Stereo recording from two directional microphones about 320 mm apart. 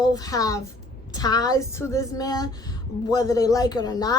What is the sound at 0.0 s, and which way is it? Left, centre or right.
A woman's voice, centre.